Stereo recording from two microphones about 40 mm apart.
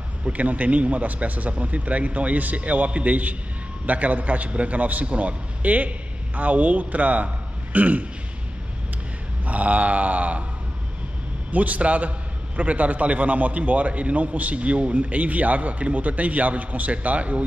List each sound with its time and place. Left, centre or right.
0.2 s a man's voice: right
7.7 s throat clearing: right
9.5 s a man's voice: right
11.5 s a man's voice: right